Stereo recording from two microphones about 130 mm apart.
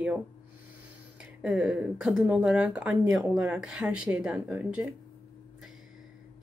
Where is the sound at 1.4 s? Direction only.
5° right (ahead or behind).